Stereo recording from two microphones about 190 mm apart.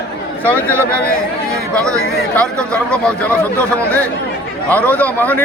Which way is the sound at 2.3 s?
5° left (ahead or behind).